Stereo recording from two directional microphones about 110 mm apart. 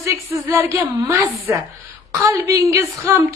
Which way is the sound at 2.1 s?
30° right (ahead or behind).